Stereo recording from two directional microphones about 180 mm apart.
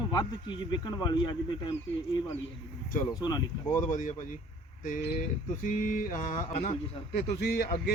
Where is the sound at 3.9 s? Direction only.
45° left (ahead or behind).